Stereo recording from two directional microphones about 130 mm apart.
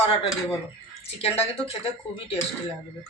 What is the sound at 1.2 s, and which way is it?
Speech, 50° left (ahead or behind).